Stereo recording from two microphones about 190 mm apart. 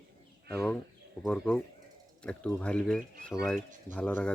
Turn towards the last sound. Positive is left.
turn(degrees=5)  # may be behind; listen again after turning